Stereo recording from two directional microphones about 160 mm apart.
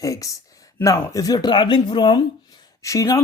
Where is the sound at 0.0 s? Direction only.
20° left (ahead or behind).